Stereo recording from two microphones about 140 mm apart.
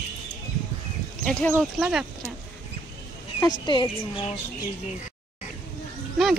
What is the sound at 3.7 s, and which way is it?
Speech, 35° left (ahead or behind).